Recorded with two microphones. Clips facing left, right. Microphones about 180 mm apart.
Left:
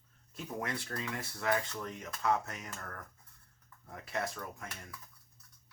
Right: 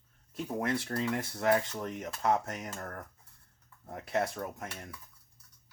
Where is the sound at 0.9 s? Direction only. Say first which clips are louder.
Right 7 dB; 35° right (ahead or behind).